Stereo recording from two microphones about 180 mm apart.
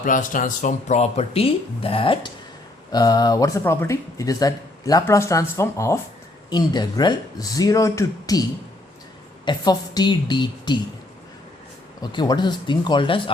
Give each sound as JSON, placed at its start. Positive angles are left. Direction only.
{"t": 0.0, "sound": "speech", "side_deg": 50}
{"t": 9.5, "sound": "speech", "side_deg": 25}
{"t": 12.1, "sound": "speech", "side_deg": 25}